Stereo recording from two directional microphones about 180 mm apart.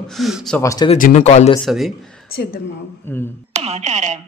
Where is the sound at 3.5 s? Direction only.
35° right (ahead or behind).